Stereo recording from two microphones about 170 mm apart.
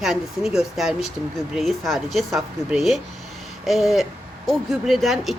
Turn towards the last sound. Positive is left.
turn(degrees=0)  # may be behind; listen again after turning